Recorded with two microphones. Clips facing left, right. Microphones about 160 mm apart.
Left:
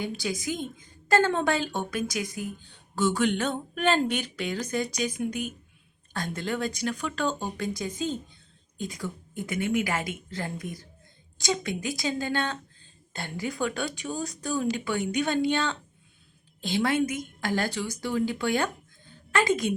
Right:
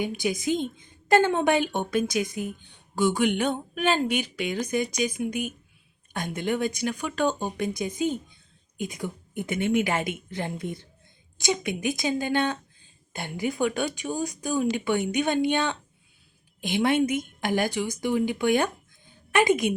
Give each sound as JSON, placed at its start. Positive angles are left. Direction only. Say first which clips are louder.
{"t": 0.0, "sound": "a woman's voice", "louder": "right 4 dB", "side_deg": -20}